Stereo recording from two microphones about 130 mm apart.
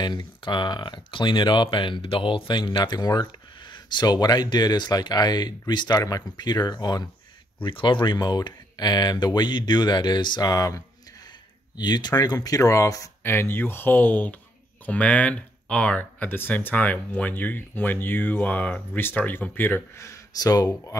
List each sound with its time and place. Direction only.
0.0 s speech: 35° left (ahead or behind)